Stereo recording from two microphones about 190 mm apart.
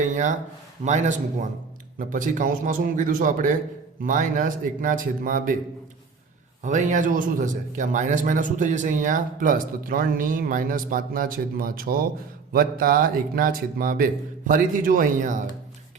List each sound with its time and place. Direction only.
0.9 s a man's voice: 40° right (ahead or behind)
6.7 s a man's voice: 40° right (ahead or behind)